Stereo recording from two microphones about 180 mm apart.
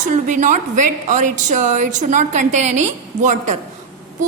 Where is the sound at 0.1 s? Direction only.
45° right (ahead or behind).